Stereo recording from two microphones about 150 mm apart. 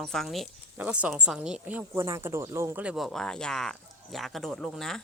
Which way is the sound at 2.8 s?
5° right (ahead or behind).